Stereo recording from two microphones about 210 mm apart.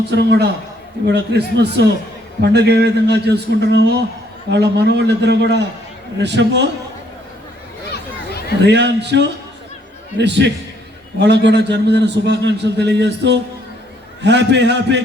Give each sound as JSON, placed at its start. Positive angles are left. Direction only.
{"t": 0.1, "sound": "a man's voice", "side_deg": -55}
{"t": 8.6, "sound": "a man's voice", "side_deg": -55}